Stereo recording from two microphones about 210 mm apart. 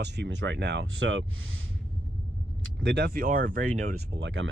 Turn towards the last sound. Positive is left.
turn(degrees=-65)  # may be behind; listen again after turning